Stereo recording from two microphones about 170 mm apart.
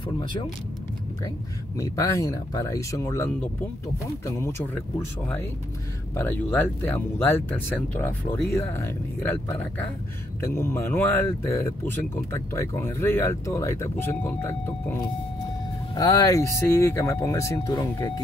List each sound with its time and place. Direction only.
1.8 s speech: 20° left (ahead or behind)
6.1 s speech: 10° left (ahead or behind)